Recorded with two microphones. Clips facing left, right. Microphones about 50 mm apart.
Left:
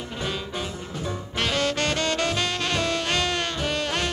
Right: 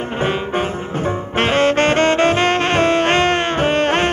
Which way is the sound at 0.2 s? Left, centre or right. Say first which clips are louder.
Right 11 dB; right.